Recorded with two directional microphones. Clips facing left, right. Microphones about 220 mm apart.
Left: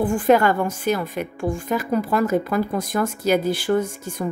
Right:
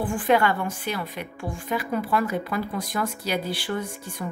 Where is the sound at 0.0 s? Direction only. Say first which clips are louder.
Left 5 dB; 45° left (ahead or behind).